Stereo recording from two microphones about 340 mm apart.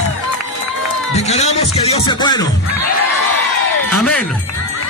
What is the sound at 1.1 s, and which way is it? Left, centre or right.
Speech, centre.